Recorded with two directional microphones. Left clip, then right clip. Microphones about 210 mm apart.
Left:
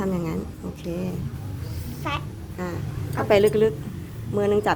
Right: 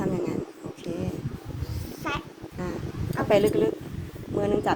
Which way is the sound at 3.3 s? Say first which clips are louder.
Left 4 dB; 25° left (ahead or behind).